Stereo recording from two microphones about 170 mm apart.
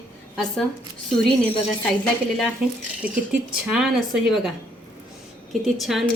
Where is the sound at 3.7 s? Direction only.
Centre (ahead or behind).